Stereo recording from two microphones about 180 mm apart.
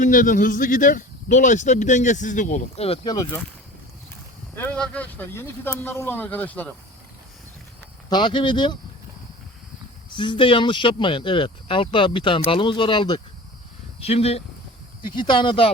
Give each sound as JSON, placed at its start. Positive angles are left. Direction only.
{"t": 0.0, "sound": "speech", "side_deg": 45}
{"t": 4.5, "sound": "speech", "side_deg": 10}
{"t": 8.1, "sound": "speech", "side_deg": 25}
{"t": 10.1, "sound": "speech", "side_deg": 25}